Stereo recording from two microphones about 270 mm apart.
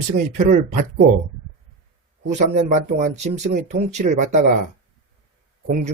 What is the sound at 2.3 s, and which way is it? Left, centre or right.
A man's voice, right.